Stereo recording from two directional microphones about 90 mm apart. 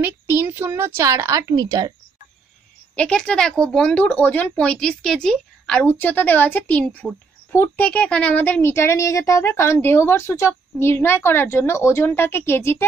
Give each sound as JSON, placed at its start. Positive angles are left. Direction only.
{"t": 0.0, "sound": "a child's voice", "side_deg": -25}
{"t": 3.0, "sound": "a woman's voice", "side_deg": 10}